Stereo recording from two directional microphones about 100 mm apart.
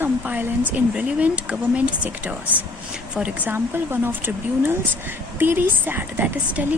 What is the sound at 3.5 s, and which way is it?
Speech, 20° right (ahead or behind).